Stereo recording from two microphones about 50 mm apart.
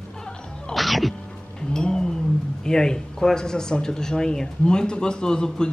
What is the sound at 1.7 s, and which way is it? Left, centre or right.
Cat, centre.